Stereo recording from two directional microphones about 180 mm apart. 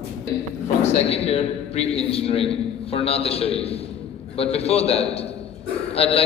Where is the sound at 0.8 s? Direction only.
35° left (ahead or behind).